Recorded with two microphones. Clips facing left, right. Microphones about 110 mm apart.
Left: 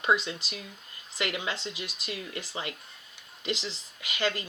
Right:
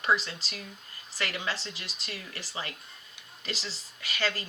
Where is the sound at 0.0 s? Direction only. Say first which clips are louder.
Left 1 dB; 20° left (ahead or behind).